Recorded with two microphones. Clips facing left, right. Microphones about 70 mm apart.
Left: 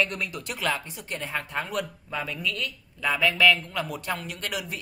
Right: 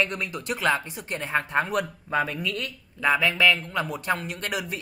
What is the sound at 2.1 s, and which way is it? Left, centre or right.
Speech, right.